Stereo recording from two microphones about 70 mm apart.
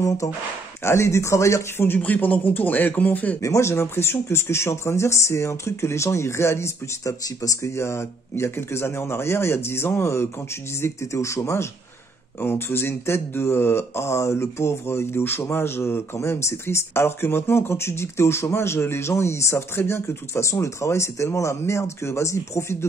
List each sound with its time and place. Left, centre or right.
0.8 s speech: left
1.9 s a man's voice: left
3.4 s speech: left
12.4 s speech: left